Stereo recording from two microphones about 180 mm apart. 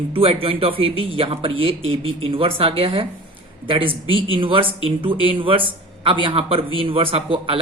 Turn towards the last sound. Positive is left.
turn(degrees=-30)  # may be behind; listen again after turning